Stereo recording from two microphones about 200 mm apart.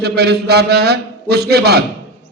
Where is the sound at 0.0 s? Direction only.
55° right (ahead or behind).